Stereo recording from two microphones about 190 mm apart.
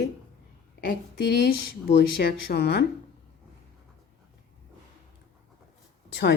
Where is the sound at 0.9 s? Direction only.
60° left (ahead or behind).